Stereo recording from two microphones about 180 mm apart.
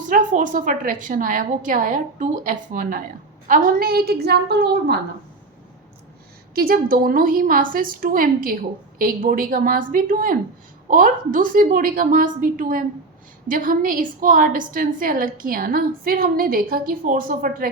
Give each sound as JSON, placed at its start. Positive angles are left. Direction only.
{"t": 0.1, "sound": "a woman's voice", "side_deg": -45}
{"t": 6.5, "sound": "a woman's voice", "side_deg": -55}